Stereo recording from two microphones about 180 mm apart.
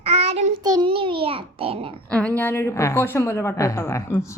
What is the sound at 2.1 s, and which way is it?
A woman's voice, 5° left (ahead or behind).